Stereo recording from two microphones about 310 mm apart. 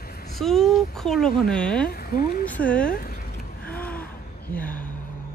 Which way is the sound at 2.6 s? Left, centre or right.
Centre.